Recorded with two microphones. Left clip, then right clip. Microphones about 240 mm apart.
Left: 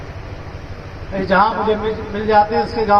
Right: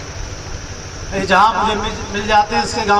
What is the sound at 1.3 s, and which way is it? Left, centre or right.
Speech, right.